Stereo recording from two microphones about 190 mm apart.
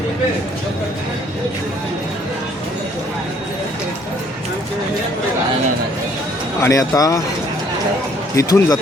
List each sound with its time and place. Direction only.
6.6 s speech: 15° left (ahead or behind)
8.4 s speech: 20° left (ahead or behind)